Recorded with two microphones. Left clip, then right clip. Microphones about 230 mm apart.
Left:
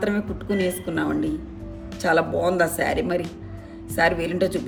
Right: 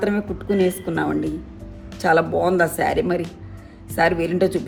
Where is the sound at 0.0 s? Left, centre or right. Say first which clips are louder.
Right 2 dB; centre.